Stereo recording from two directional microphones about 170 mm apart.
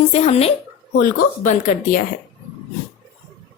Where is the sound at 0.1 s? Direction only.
40° left (ahead or behind).